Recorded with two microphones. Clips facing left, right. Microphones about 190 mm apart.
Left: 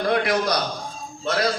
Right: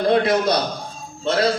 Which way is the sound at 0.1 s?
25° right (ahead or behind).